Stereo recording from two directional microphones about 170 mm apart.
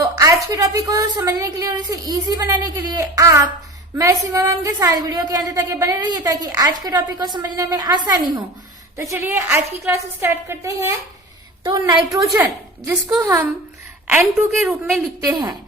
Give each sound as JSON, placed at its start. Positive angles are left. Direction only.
{"t": 0.0, "sound": "a woman's voice", "side_deg": -20}
{"t": 14.1, "sound": "a woman's voice", "side_deg": -5}
{"t": 15.2, "sound": "a woman's voice", "side_deg": -20}